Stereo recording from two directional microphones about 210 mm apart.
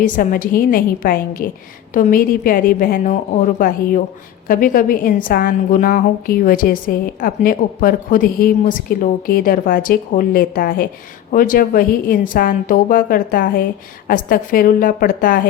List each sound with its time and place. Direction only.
0.0 s a woman's voice: 40° left (ahead or behind)